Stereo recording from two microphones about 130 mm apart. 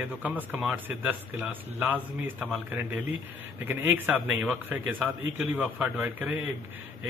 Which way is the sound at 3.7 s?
15° right (ahead or behind).